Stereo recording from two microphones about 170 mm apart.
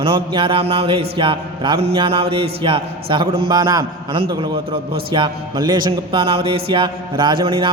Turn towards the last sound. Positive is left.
turn(degrees=-30)  # may be behind; listen again after turning